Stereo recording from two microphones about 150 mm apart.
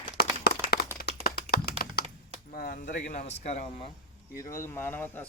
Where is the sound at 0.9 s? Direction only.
90° left.